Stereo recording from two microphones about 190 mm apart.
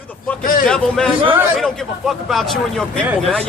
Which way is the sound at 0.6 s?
5° left (ahead or behind).